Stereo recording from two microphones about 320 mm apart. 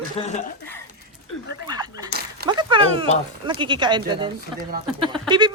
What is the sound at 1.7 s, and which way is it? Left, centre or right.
A woman's voice, centre.